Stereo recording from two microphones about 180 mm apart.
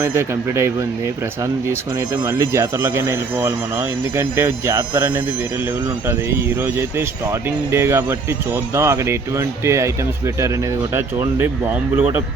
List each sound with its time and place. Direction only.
0.0 s speech: 15° right (ahead or behind)
6.6 s speech: 10° right (ahead or behind)